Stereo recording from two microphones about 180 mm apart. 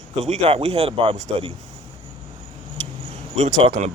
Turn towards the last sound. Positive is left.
turn(degrees=-40)  # may be behind; listen again after turning